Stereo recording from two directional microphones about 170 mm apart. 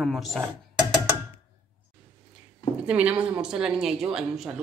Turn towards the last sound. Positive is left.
turn(degrees=-5)  # may be behind; listen again after turning